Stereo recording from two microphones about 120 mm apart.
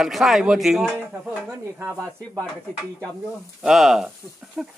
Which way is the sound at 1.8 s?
25° right (ahead or behind).